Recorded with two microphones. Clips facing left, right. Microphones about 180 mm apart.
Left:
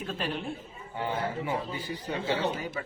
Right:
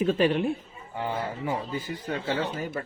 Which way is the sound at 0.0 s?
75° right (ahead or behind).